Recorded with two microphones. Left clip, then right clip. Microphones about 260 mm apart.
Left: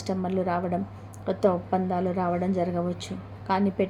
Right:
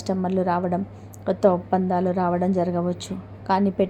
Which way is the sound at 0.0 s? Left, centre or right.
Centre.